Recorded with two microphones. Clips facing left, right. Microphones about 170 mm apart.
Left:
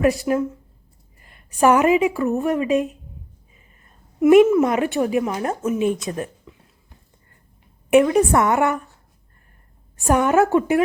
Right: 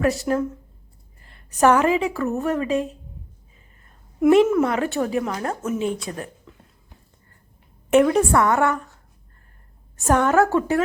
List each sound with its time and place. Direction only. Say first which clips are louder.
0.0 s a woman's voice: left 2 dB; 15° left (ahead or behind)
4.2 s a woman's voice: left 3 dB; 10° left (ahead or behind)
8.3 s a woman's voice: left 1 dB; 20° left (ahead or behind)
10.0 s a woman's voice: left 1 dB; 15° left (ahead or behind)